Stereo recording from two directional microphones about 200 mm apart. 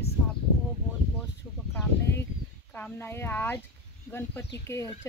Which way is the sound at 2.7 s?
10° left (ahead or behind).